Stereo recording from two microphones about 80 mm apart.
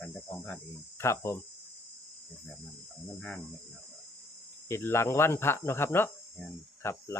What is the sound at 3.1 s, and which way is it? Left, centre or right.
Cricket, centre.